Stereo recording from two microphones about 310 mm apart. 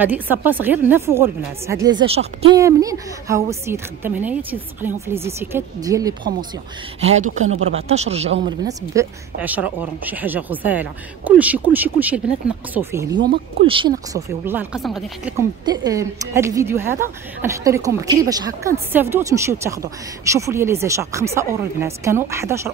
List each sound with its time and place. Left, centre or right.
0.0 s speech: centre